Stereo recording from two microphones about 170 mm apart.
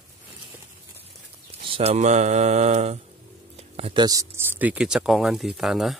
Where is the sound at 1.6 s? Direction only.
35° right (ahead or behind).